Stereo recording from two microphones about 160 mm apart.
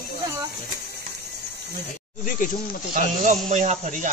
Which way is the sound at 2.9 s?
50° right (ahead or behind).